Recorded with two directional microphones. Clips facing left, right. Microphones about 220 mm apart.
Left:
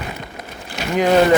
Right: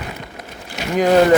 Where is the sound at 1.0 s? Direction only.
40° right (ahead or behind).